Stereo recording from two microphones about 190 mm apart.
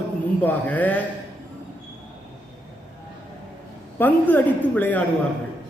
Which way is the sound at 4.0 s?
10° left (ahead or behind).